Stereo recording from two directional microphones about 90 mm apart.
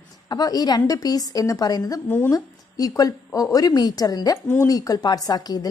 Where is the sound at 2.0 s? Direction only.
20° left (ahead or behind).